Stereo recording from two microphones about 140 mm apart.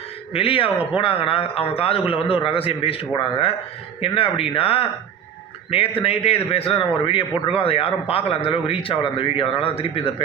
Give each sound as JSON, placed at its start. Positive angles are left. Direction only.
{"t": 0.3, "sound": "a man's voice", "side_deg": 40}